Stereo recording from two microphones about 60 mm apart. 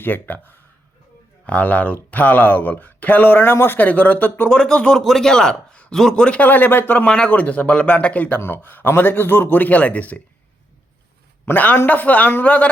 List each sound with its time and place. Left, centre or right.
0.0 s a man's voice: left
3.8 s speech: left
4.4 s a man's voice: centre
6.2 s speech: left
8.4 s a man's voice: left
11.4 s a man's voice: left